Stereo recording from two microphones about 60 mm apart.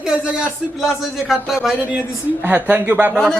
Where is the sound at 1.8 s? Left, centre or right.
Centre.